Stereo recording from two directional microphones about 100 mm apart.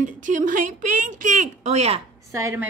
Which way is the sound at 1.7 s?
90° right.